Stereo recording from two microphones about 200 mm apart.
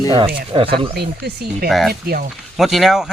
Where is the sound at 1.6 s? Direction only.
Centre (ahead or behind).